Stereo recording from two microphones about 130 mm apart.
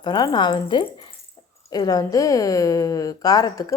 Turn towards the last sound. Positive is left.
turn(degrees=30)  # may be behind; listen again after turning